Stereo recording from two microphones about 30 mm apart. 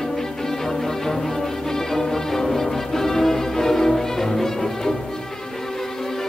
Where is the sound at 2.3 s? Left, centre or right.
Centre.